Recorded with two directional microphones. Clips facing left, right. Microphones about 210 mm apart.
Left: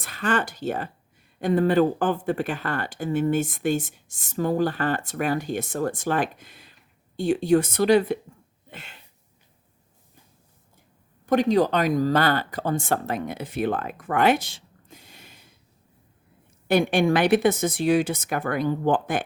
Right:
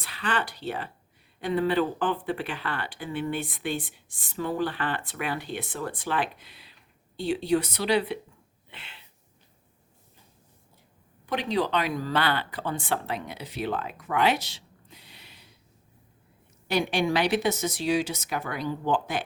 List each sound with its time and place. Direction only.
0.0 s speech: 45° left (ahead or behind)
8.7 s a sound: 45° left (ahead or behind)
11.3 s speech: 45° left (ahead or behind)
16.6 s speech: 50° left (ahead or behind)